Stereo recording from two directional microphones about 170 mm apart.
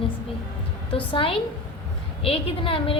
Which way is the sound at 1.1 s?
30° left (ahead or behind).